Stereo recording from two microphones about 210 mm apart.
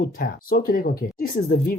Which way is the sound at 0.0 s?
45° left (ahead or behind).